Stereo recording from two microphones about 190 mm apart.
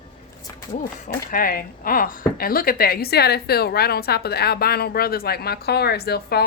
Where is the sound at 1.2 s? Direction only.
50° left (ahead or behind).